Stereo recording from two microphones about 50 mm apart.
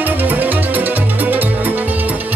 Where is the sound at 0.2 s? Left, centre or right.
Right.